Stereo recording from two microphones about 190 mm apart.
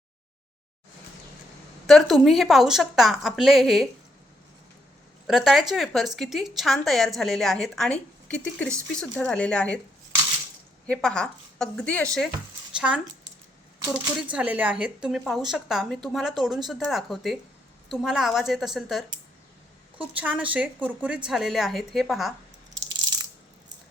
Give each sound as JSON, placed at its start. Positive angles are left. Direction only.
{"t": 1.9, "sound": "a woman's voice", "side_deg": 0}
{"t": 5.2, "sound": "a woman's voice", "side_deg": 0}
{"t": 10.8, "sound": "a woman's voice", "side_deg": 5}
{"t": 14.0, "sound": "a woman's voice", "side_deg": -5}
{"t": 22.9, "sound": "biting", "side_deg": -20}